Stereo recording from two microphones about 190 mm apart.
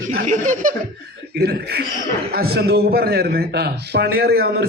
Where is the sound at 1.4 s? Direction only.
55° right (ahead or behind).